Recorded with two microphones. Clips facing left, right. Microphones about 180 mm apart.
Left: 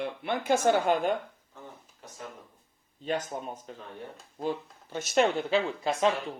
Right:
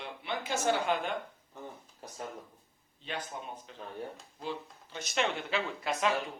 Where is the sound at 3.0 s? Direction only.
40° left (ahead or behind).